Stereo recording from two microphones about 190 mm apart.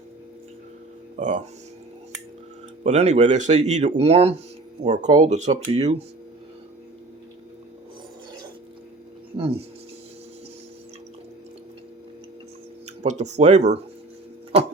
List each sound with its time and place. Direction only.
1.2 s speech: 40° right (ahead or behind)
2.8 s speech: 35° right (ahead or behind)
9.4 s speech: 30° right (ahead or behind)
13.0 s speech: 35° right (ahead or behind)